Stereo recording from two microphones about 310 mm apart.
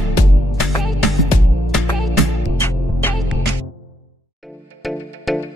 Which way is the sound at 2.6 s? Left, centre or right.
Centre.